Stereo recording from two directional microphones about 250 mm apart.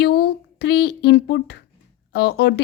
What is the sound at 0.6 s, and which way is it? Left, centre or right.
Speech, left.